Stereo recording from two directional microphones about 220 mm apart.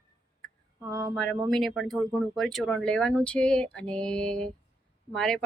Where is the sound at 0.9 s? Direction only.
15° right (ahead or behind).